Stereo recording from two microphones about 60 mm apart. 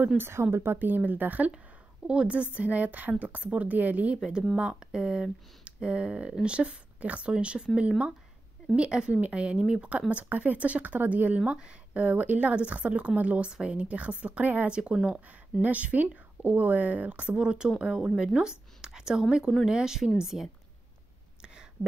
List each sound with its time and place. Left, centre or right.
0.2 s a woman's voice: right
0.7 s speech: right
4.2 s speech: centre; by 14.8 s right
14.8 s speech: centre
15.2 s speech: right; by 20.4 s centre